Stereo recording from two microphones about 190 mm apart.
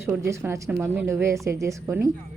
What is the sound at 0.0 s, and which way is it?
A woman's voice, 15° right (ahead or behind).